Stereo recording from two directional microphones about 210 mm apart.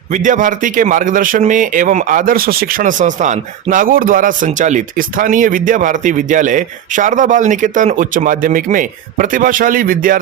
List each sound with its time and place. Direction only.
0.1 s a man's voice: 35° right (ahead or behind)